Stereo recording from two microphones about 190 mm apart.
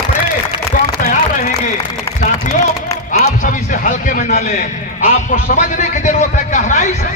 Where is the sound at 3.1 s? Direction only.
40° left (ahead or behind).